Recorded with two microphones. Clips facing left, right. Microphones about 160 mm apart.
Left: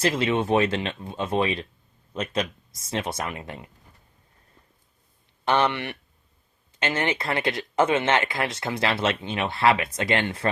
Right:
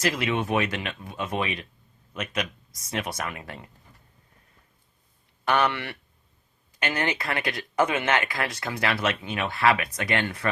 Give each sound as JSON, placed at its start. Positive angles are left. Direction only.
{"t": 0.0, "sound": "speech", "side_deg": 25}
{"t": 5.5, "sound": "speech", "side_deg": 20}